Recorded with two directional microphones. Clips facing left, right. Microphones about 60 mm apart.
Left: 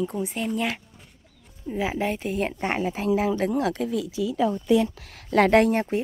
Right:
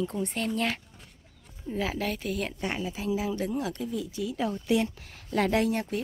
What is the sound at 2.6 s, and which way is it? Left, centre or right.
Speech, left.